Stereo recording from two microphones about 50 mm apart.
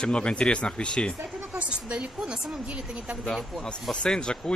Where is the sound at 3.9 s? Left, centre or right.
Centre.